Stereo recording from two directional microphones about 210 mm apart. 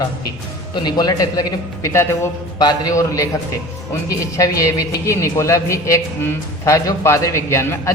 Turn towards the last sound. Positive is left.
turn(degrees=15)  # may be behind; listen again after turning